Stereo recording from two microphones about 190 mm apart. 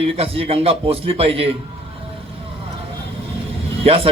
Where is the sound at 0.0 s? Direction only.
30° right (ahead or behind).